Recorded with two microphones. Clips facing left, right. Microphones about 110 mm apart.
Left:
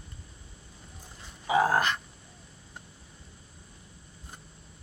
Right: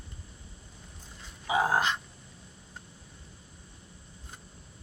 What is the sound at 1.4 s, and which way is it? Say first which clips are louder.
Dog: left 2 dB; 10° right (ahead or behind).